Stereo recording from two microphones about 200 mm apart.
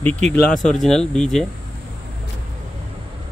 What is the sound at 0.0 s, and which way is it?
Speech, 5° left (ahead or behind).